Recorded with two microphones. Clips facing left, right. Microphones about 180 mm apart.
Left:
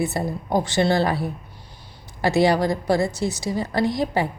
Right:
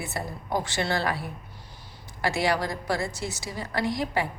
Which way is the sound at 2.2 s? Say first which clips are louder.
Left 7 dB; 20° left (ahead or behind).